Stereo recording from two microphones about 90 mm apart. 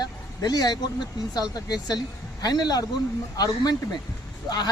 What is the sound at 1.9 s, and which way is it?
A woman's voice, 50° left (ahead or behind).